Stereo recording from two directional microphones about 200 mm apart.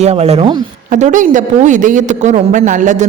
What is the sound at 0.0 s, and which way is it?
A woman's voice, 30° right (ahead or behind).